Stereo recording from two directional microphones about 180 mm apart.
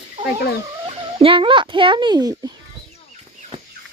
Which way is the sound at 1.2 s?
30° right (ahead or behind).